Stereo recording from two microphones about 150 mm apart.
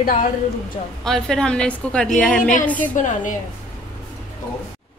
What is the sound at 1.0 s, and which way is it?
A woman's voice, 5° left (ahead or behind).